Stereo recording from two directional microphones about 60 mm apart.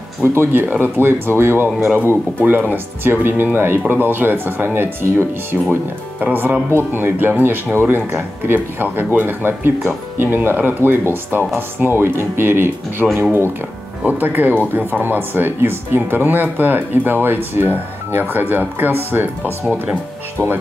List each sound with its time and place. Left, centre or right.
0.2 s speech: right
6.1 s speech: right